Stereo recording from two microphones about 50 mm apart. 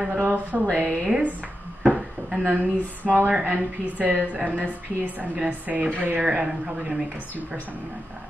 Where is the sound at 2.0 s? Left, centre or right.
Centre.